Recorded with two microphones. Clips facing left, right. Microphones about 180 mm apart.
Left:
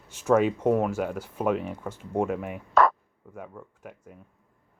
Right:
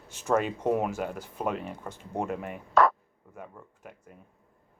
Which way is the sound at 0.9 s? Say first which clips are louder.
Left 4 dB; 10° left (ahead or behind).